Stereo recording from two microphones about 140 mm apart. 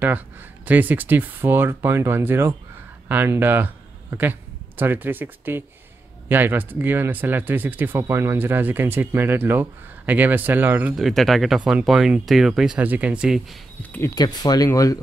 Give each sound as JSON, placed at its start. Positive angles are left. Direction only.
{"t": 0.7, "sound": "a man's voice", "side_deg": -10}
{"t": 11.1, "sound": "speech", "side_deg": 0}
{"t": 14.1, "sound": "speech", "side_deg": 30}